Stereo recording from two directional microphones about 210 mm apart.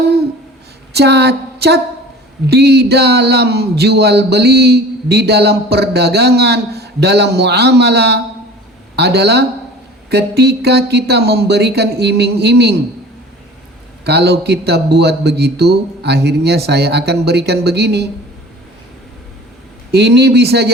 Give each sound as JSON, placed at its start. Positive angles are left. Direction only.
{"t": 0.9, "sound": "speech", "side_deg": -50}
{"t": 14.0, "sound": "speech", "side_deg": -50}
{"t": 19.9, "sound": "speech", "side_deg": -50}